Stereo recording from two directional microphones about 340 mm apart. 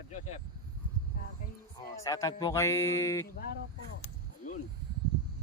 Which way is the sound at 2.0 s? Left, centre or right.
Centre.